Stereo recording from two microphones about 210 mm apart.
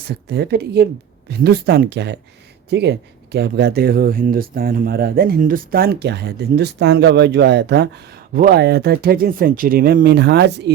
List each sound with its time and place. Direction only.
0.0 s speech: 50° right (ahead or behind)